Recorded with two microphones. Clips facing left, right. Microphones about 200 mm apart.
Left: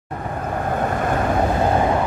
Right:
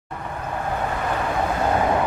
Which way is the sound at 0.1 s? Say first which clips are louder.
Left 4 dB; 45° left (ahead or behind).